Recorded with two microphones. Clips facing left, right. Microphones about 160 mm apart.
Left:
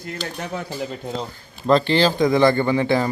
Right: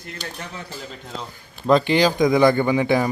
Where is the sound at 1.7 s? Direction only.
10° right (ahead or behind).